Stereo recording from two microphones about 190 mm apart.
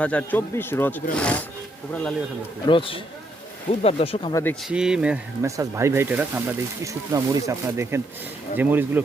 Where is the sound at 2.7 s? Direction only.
30° left (ahead or behind).